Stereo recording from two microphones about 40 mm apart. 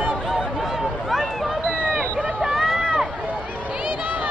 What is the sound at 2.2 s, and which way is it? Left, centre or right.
Vehicle, centre.